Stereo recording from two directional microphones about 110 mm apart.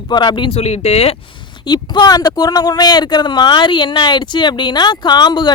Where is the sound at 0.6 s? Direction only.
70° left (ahead or behind).